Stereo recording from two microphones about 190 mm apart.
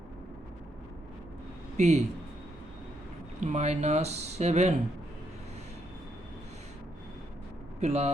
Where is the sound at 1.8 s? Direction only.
35° right (ahead or behind).